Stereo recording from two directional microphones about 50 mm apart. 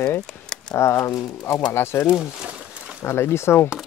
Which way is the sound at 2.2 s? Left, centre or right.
Centre.